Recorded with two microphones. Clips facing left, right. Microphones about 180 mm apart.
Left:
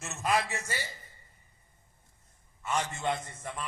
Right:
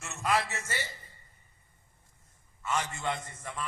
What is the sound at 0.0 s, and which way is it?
Speech, 20° left (ahead or behind).